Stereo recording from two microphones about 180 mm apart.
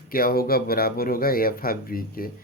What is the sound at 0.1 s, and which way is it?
Speech, 55° left (ahead or behind).